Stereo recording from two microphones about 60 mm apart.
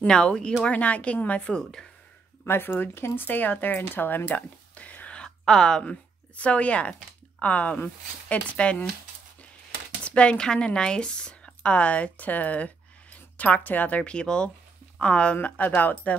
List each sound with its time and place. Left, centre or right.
0.0 s speech: centre
2.4 s speech: left; by 5.9 s centre
6.3 s speech: left
10.0 s speech: centre